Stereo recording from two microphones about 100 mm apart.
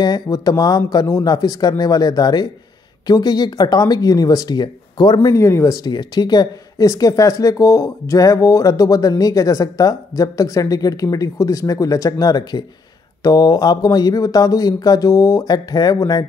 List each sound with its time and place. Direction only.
0.0 s speech: 40° left (ahead or behind)
5.3 s speech: 30° left (ahead or behind)
5.9 s speech: 45° left (ahead or behind)